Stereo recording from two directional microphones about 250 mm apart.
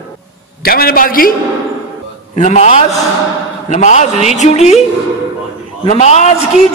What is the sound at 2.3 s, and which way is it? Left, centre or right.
A woman's voice, left.